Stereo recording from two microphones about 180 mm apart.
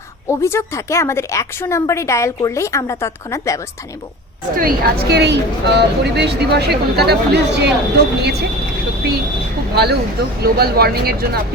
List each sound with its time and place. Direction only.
0.3 s speech: 15° left (ahead or behind)
4.5 s a woman's voice: 55° right (ahead or behind)
10.4 s a woman's voice: 60° right (ahead or behind)